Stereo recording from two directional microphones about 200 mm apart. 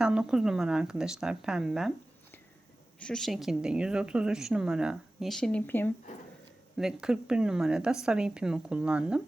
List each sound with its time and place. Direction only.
0.0 s speech: 5° right (ahead or behind)
3.0 s speech: 5° left (ahead or behind)
6.7 s speech: centre (ahead or behind)